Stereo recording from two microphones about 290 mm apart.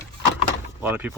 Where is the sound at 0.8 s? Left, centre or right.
Centre.